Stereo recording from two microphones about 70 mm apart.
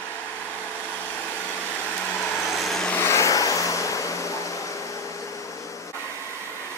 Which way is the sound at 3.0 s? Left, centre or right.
Left.